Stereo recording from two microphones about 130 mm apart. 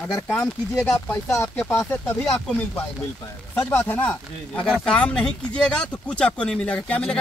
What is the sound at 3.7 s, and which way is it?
Speech, 15° left (ahead or behind).